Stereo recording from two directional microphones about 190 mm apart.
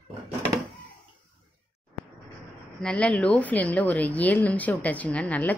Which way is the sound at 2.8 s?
5° left (ahead or behind).